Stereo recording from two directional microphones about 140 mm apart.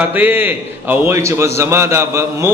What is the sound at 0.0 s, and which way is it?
A man's voice, 15° right (ahead or behind).